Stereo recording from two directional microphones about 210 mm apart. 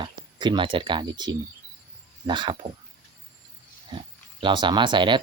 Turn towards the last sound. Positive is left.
turn(degrees=-20)  # may be behind; listen again after turning